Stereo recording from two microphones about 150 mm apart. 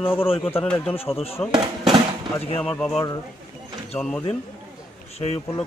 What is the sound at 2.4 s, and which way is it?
Speech, 40° left (ahead or behind).